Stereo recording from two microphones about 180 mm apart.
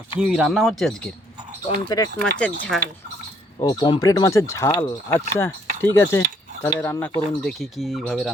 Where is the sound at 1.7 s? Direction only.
20° left (ahead or behind).